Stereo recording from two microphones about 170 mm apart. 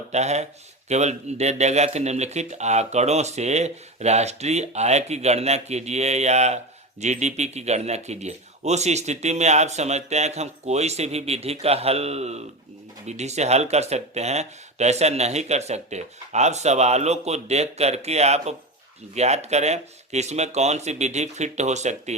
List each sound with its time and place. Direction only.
0.1 s a man's voice: 40° right (ahead or behind)